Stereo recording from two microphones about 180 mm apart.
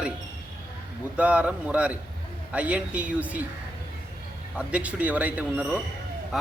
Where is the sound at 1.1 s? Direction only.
5° right (ahead or behind).